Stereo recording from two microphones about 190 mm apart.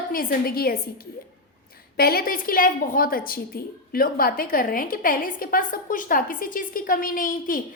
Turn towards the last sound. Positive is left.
turn(degrees=45)  # may be behind; listen again after turning